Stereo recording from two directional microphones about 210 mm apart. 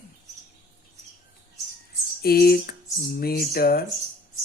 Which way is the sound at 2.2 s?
45° left (ahead or behind).